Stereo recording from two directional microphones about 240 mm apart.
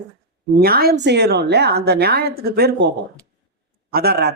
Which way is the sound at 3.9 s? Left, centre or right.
Right.